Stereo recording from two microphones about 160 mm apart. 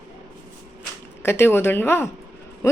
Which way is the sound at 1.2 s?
15° left (ahead or behind).